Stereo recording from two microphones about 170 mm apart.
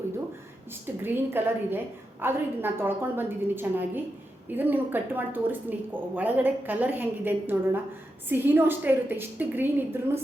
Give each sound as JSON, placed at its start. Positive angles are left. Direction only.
{"t": 0.9, "sound": "a woman's voice", "side_deg": -10}